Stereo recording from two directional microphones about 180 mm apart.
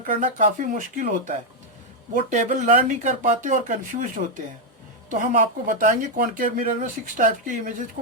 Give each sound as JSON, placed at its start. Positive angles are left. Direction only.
{"t": 0.2, "sound": "speech", "side_deg": -45}